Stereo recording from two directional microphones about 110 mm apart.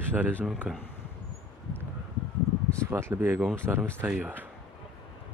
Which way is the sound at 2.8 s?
25° right (ahead or behind).